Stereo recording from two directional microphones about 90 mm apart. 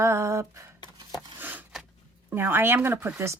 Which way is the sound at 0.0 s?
30° right (ahead or behind).